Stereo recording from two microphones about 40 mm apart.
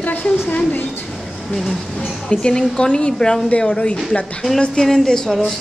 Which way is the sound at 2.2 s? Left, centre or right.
Centre.